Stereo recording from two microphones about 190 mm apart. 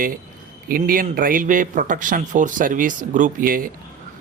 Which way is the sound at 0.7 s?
50° right (ahead or behind).